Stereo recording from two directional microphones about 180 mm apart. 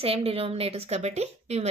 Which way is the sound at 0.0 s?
30° right (ahead or behind).